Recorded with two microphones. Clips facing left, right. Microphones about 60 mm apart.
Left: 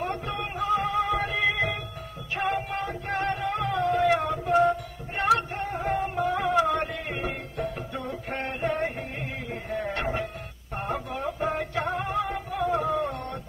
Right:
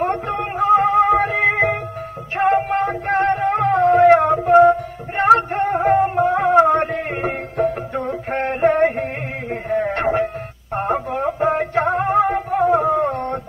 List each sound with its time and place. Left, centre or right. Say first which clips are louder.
0.0 s music: right 10 dB; right
4.4 s music: right 11 dB; right
12.9 s carnatic music: right 9 dB; right